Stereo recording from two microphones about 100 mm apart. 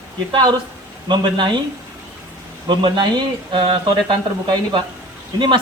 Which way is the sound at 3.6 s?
55° right (ahead or behind).